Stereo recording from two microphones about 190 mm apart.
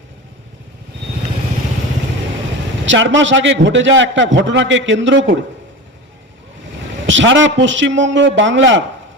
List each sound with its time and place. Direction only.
2.8 s a man's voice: 75° right (ahead or behind)
7.1 s a man's voice: 80° right